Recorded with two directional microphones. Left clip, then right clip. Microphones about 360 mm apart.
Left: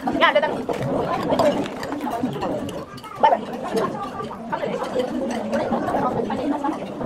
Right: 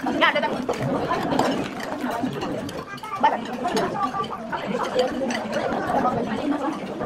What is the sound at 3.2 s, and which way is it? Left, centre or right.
Gargling, left.